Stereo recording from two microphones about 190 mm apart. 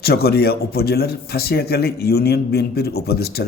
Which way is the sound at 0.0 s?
55° left (ahead or behind).